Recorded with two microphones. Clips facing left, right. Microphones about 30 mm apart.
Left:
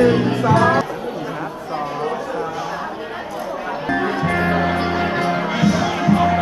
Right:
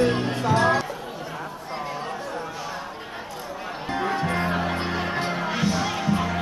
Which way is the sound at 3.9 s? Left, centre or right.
Left.